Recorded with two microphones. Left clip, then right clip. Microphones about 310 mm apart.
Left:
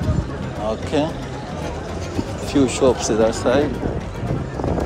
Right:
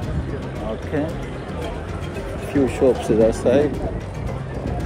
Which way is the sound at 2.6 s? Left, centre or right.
Centre.